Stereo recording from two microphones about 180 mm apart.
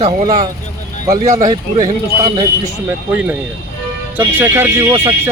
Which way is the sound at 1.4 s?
20° right (ahead or behind).